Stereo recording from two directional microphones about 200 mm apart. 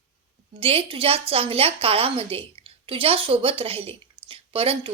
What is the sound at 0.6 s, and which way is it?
A woman's voice, 25° right (ahead or behind).